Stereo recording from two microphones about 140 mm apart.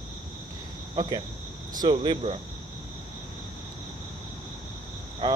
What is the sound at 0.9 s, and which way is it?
Speech, 35° right (ahead or behind).